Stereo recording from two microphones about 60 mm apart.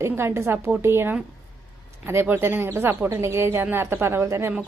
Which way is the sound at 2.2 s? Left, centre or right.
Right.